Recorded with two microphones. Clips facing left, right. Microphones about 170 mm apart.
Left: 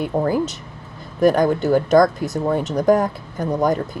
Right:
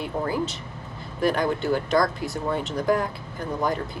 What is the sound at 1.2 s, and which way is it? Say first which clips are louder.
Speech: left 7 dB; 45° left (ahead or behind).